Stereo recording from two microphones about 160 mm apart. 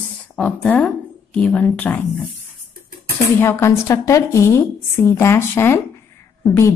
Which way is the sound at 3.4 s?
15° left (ahead or behind).